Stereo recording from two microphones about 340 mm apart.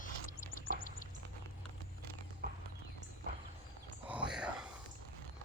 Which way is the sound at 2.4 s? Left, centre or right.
Right.